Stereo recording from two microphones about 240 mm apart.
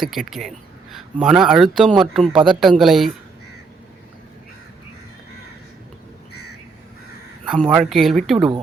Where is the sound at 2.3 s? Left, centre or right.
Right.